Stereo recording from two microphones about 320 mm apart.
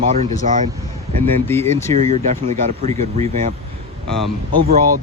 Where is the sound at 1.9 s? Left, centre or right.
Right.